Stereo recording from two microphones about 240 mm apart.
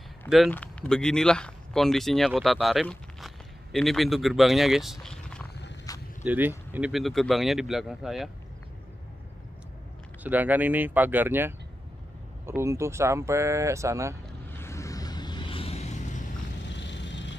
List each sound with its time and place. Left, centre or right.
0.2 s speech: centre
5.9 s a sound: centre
6.2 s speech: centre
10.2 s speech: centre
14.5 s a sound: centre; by 16.3 s left
16.6 s vehicle: left